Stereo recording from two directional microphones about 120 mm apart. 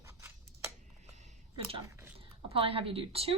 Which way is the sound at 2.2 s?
50° right (ahead or behind).